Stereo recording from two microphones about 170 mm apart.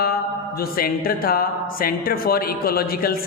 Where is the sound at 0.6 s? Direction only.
60° left (ahead or behind).